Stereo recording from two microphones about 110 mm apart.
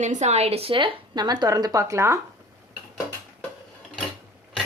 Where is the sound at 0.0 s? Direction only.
90° right; by 2.1 s 25° right (ahead or behind).